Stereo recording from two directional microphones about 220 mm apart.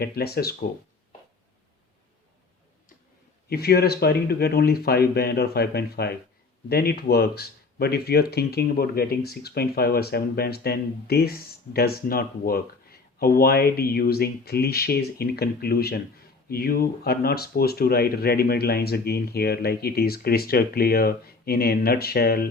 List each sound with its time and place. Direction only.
0.0 s speech: 45° left (ahead or behind)
3.5 s speech: 45° left (ahead or behind)